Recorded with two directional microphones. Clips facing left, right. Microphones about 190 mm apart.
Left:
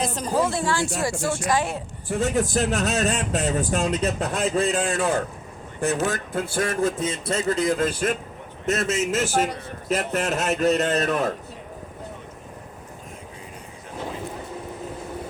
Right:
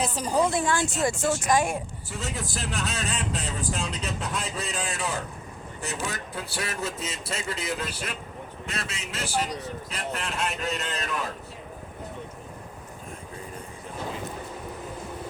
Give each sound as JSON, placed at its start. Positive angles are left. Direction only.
{"t": 0.0, "sound": "speech", "side_deg": -15}
{"t": 2.0, "sound": "a man's voice", "side_deg": 50}